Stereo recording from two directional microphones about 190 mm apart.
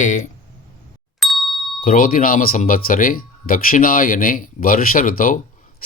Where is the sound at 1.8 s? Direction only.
45° left (ahead or behind).